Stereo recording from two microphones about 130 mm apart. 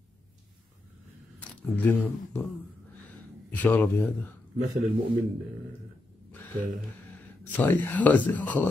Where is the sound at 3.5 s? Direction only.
15° left (ahead or behind).